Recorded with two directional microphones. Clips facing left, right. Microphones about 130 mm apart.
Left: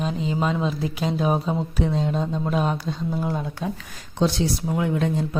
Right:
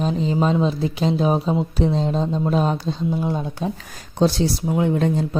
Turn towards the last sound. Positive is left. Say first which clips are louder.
# right 4 dB
turn(degrees=-35)  # may be behind; listen again after turning